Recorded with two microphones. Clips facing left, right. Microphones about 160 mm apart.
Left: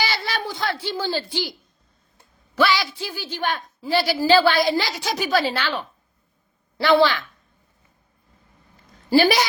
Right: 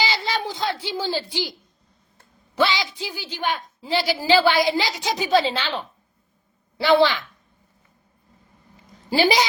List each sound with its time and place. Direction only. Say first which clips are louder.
0.0 s a woman's voice: right 1 dB; 15° right (ahead or behind)
2.6 s a woman's voice: left 1 dB; 20° right (ahead or behind)
8.7 s a sound: left 6 dB; 15° right (ahead or behind)